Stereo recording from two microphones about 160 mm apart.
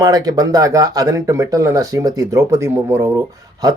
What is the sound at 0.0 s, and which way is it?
Speech, 25° right (ahead or behind).